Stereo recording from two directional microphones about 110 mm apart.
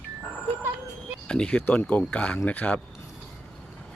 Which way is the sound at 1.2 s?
10° left (ahead or behind).